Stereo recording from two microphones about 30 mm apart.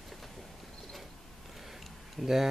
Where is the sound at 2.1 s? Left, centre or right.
Centre.